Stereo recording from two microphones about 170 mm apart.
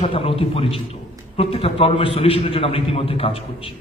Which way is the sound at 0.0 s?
35° left (ahead or behind).